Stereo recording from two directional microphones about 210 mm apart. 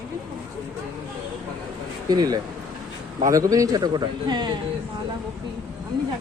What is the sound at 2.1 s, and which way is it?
A man's voice, 20° right (ahead or behind).